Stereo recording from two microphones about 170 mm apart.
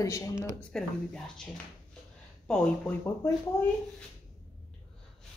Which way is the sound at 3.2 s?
20° left (ahead or behind).